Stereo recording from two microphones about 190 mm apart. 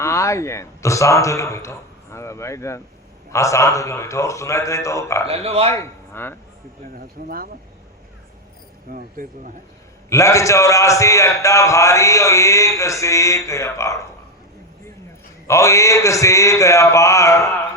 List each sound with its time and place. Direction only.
0.0 s a man's voice: 15° left (ahead or behind)
5.2 s speech: 30° right (ahead or behind)
5.7 s a man's voice: 15° left (ahead or behind)
6.9 s speech: 50° right (ahead or behind)
8.9 s speech: 45° right (ahead or behind)
10.1 s a man's voice: 15° left (ahead or behind)
15.4 s a man's voice: 15° left (ahead or behind)